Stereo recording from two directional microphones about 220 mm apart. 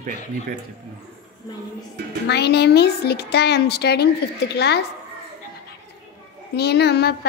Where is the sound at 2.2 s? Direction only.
50° left (ahead or behind).